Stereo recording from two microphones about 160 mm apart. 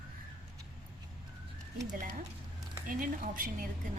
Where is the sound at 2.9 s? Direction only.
55° right (ahead or behind).